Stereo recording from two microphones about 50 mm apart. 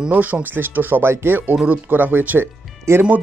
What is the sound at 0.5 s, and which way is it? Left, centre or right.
Speech, right.